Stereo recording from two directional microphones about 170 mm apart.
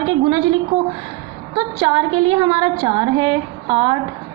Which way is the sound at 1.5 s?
30° right (ahead or behind).